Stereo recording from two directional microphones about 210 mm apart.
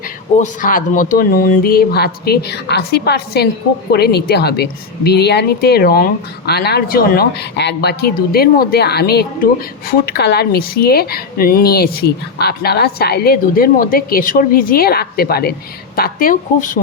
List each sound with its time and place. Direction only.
0.3 s a woman's voice: 40° left (ahead or behind)